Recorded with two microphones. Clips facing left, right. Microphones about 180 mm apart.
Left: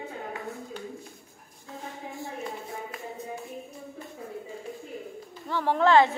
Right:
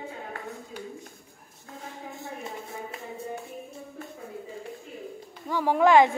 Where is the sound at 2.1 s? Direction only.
20° right (ahead or behind).